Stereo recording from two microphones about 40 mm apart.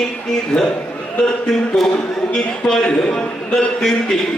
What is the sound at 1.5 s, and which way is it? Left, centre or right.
A man's voice, centre.